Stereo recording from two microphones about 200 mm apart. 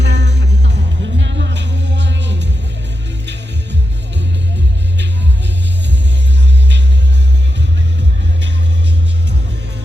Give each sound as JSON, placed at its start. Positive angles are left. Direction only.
{"t": 0.0, "sound": "music", "side_deg": -60}